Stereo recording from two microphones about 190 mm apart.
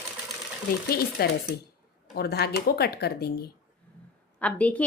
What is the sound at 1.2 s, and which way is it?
Speech, 55° left (ahead or behind).